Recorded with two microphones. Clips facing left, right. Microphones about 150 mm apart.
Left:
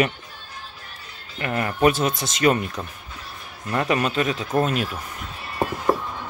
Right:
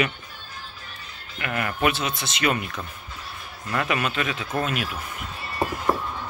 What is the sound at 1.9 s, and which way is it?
Speech, 45° left (ahead or behind).